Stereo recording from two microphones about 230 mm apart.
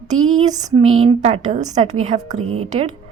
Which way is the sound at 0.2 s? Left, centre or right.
Right.